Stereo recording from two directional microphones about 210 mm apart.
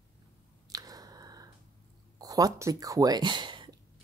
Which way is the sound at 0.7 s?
15° right (ahead or behind).